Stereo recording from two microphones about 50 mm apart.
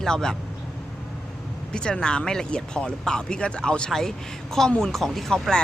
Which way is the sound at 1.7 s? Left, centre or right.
Centre.